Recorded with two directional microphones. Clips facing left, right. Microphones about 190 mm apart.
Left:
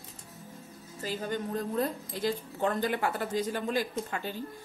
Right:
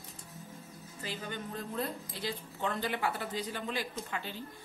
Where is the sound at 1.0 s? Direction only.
40° left (ahead or behind).